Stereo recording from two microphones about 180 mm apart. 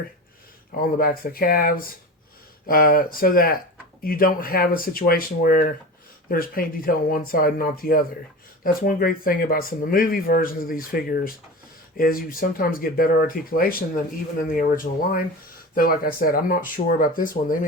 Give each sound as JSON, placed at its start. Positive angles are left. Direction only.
{"t": 0.8, "sound": "speech", "side_deg": 55}